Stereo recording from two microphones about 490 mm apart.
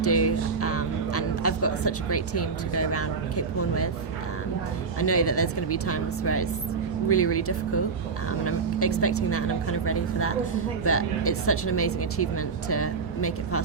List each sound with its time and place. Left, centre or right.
0.0 s speech: left
4.9 s speech: left